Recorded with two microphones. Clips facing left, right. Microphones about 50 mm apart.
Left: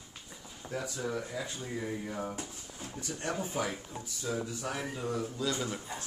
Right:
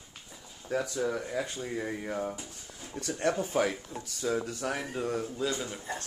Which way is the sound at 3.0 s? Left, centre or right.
Right.